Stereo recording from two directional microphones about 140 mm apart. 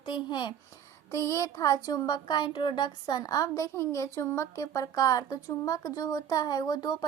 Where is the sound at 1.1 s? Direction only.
20° left (ahead or behind).